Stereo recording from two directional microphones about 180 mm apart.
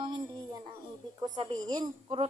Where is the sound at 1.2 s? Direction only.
20° right (ahead or behind).